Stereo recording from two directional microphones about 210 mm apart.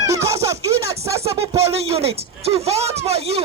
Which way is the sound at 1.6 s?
30° right (ahead or behind).